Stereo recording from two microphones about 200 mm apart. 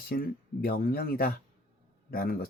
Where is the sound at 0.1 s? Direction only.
50° left (ahead or behind).